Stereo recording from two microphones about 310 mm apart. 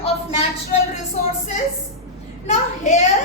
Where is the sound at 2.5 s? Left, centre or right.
Left.